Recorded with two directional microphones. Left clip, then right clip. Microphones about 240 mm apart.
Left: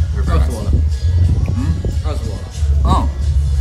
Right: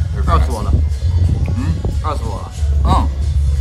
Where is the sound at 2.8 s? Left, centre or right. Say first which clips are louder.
Right 1 dB; centre.